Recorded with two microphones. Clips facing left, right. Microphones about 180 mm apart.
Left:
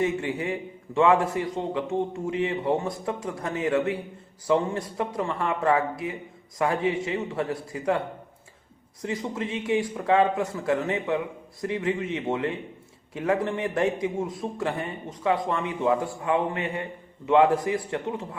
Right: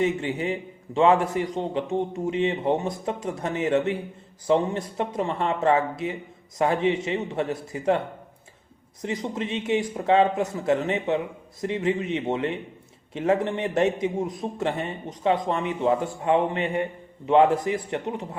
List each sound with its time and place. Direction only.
0.0 s a man's voice: 20° right (ahead or behind)